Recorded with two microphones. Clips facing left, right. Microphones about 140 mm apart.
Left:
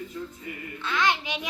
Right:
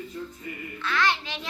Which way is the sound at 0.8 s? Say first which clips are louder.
Even; 20° left (ahead or behind).